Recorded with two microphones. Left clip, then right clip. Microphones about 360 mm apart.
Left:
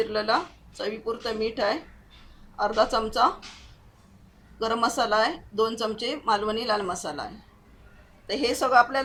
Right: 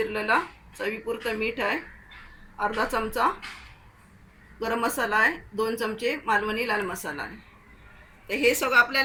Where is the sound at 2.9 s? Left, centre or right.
Centre.